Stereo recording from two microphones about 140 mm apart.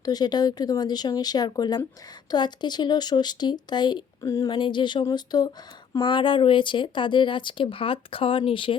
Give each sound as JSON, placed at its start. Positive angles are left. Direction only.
{"t": 0.0, "sound": "speech", "side_deg": 30}